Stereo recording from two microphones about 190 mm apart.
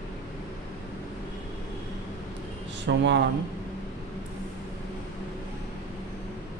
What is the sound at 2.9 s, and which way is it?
Speech, 65° right (ahead or behind).